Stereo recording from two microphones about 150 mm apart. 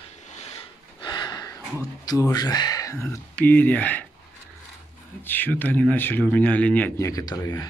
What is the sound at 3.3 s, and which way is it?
Speech, 10° left (ahead or behind).